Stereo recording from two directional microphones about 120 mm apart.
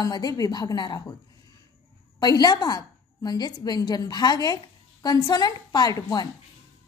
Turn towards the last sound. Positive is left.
turn(degrees=30)  # may be behind; listen again after turning